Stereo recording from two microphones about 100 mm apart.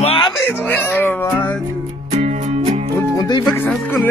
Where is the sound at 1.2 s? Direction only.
25° left (ahead or behind).